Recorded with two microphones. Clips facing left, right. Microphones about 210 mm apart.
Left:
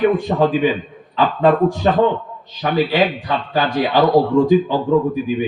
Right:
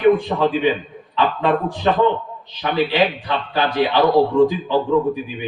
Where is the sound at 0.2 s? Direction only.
45° left (ahead or behind).